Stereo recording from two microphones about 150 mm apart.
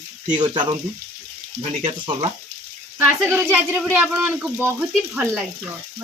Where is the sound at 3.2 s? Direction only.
15° right (ahead or behind).